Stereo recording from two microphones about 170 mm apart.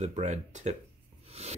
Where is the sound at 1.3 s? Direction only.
40° right (ahead or behind).